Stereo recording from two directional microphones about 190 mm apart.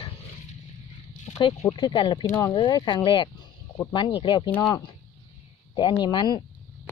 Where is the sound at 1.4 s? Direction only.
25° left (ahead or behind).